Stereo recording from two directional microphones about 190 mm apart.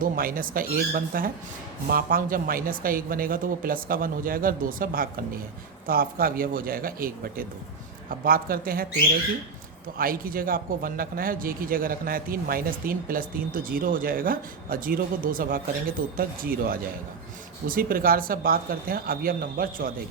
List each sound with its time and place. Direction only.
0.0 s a man's voice: 50° right (ahead or behind)
10.0 s a man's voice: 50° right (ahead or behind)